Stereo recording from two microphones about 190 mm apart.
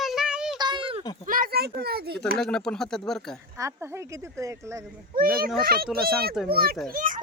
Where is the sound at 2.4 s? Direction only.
5° left (ahead or behind).